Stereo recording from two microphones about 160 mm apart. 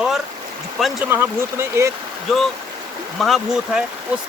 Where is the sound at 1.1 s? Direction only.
15° right (ahead or behind).